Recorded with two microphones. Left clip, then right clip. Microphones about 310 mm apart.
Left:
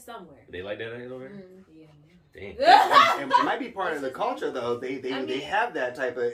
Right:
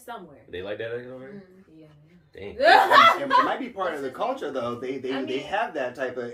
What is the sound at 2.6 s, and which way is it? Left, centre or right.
Speech, centre.